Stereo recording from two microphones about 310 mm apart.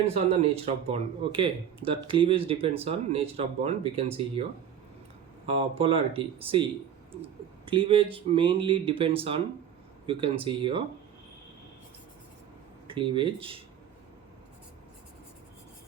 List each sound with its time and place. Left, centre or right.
0.0 s speech: centre
5.5 s speech: centre
12.9 s speech: centre